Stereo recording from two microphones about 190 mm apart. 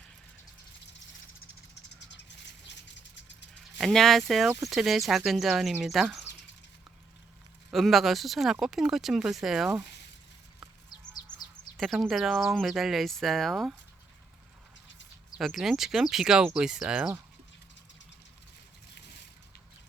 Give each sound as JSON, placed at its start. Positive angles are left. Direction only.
{"t": 2.0, "sound": "bird", "side_deg": 65}
{"t": 2.6, "sound": "a sound", "side_deg": 70}
{"t": 3.8, "sound": "speech", "side_deg": 0}
{"t": 7.7, "sound": "speech", "side_deg": 0}
{"t": 11.8, "sound": "speech", "side_deg": 0}
{"t": 15.4, "sound": "speech", "side_deg": 0}